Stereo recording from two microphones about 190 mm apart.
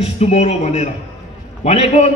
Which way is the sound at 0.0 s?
35° left (ahead or behind).